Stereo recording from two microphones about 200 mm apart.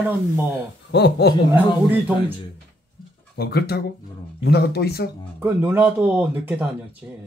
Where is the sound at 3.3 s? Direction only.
55° left (ahead or behind).